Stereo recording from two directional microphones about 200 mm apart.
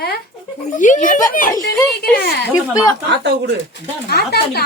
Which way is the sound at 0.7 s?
40° left (ahead or behind).